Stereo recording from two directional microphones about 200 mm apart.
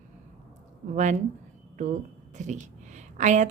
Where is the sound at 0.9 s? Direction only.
35° right (ahead or behind).